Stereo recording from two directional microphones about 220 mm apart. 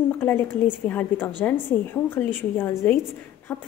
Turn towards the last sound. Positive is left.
turn(degrees=10)  # may be behind; listen again after turning